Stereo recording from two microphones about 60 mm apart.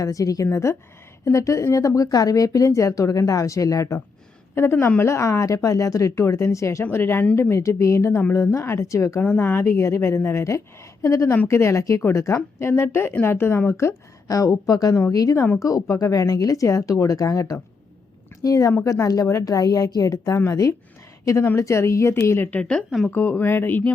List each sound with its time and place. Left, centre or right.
0.0 s speech: left
0.5 s speech: left
2.0 s speech: left
4.5 s speech: left
6.9 s speech: left
7.5 s speech: left
9.2 s speech: left
9.7 s speech: left
14.3 s a woman's voice: left
15.5 s a woman's voice: left
20.5 s speech: left
22.4 s a woman's voice: left
23.1 s speech: left